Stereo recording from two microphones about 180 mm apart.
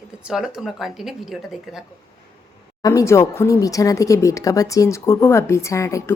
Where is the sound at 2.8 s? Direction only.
20° left (ahead or behind).